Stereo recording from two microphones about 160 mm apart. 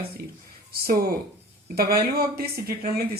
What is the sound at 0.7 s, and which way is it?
Speech, 70° right (ahead or behind).